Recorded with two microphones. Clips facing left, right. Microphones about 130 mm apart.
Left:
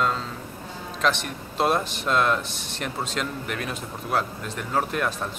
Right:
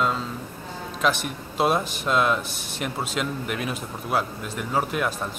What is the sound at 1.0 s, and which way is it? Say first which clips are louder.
Speech: right 1 dB; 5° right (ahead or behind).